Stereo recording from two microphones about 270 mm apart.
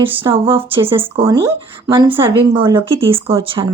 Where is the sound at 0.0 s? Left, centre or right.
Centre.